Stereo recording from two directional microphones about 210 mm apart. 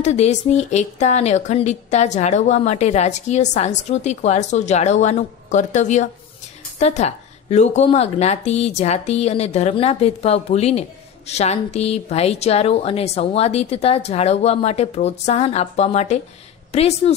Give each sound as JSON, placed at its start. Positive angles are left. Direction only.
{"t": 0.0, "sound": "a woman's voice", "side_deg": 30}